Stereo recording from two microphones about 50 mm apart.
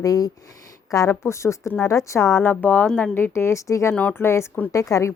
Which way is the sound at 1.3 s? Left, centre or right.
Left.